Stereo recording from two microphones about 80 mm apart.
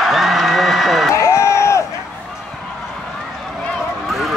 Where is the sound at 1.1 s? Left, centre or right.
Left.